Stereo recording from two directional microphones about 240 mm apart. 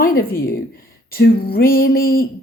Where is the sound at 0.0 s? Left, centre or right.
Left.